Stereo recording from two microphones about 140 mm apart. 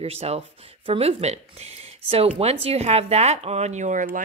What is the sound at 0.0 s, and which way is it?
A woman's voice, 45° right (ahead or behind).